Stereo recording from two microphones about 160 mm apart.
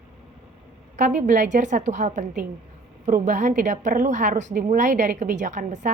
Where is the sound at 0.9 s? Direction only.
50° right (ahead or behind).